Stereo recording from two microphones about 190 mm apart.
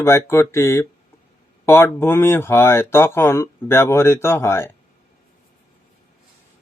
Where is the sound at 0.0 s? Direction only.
15° left (ahead or behind).